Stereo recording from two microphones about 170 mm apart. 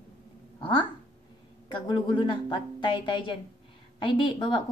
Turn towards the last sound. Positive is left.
turn(degrees=30)  # may be behind; listen again after turning